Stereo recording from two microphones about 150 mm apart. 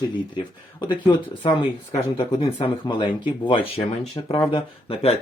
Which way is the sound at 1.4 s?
35° left (ahead or behind).